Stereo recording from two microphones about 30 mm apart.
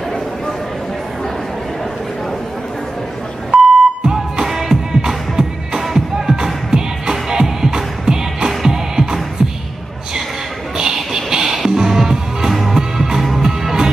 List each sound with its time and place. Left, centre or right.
3.5 s beep: right
4.5 s music: centre
10.8 s music: centre